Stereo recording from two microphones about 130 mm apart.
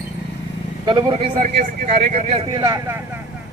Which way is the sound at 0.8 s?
45° right (ahead or behind).